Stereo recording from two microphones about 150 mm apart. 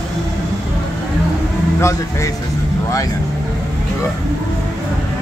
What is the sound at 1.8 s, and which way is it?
Speech, 20° left (ahead or behind).